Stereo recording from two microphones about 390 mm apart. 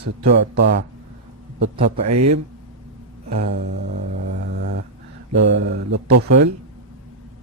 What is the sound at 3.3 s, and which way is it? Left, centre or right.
Speech, right.